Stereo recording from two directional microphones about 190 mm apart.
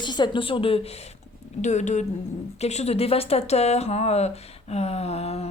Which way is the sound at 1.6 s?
40° left (ahead or behind).